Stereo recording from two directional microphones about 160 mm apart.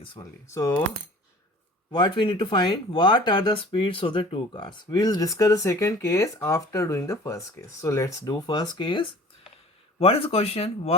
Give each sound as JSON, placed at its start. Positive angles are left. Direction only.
{"t": 0.0, "sound": "speech", "side_deg": 30}
{"t": 1.9, "sound": "speech", "side_deg": 25}